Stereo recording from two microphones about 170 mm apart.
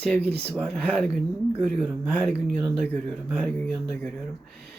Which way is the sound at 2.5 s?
5° right (ahead or behind).